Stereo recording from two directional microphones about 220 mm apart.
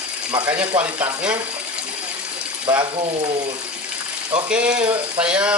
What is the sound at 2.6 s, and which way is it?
Speech, 20° right (ahead or behind).